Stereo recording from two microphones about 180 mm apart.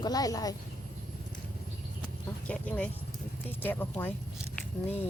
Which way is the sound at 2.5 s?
10° left (ahead or behind).